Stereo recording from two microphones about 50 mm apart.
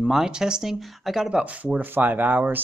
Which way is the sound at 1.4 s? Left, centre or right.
Right.